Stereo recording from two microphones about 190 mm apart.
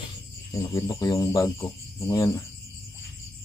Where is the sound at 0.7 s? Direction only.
15° left (ahead or behind).